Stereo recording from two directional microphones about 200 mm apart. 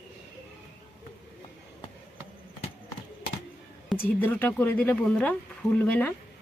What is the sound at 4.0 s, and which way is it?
A woman's voice, 10° left (ahead or behind).